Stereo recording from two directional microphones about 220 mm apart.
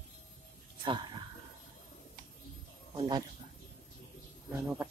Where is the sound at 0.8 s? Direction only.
20° right (ahead or behind).